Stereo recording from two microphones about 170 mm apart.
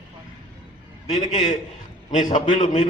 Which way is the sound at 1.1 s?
40° left (ahead or behind).